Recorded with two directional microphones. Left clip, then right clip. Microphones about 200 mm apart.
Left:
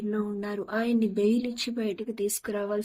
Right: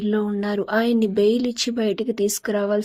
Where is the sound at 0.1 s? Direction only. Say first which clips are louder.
Right 9 dB; 40° right (ahead or behind).